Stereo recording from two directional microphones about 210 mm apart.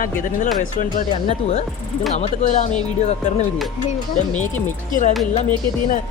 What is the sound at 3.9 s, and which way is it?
A woman's voice, 35° left (ahead or behind).